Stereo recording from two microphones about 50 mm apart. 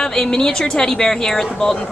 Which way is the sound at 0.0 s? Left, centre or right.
Centre.